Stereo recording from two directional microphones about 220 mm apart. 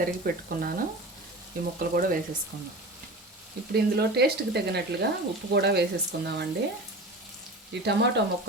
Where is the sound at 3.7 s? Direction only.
50° right (ahead or behind).